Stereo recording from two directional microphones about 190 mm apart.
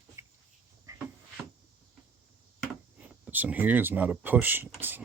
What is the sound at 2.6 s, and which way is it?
Speech, 10° right (ahead or behind).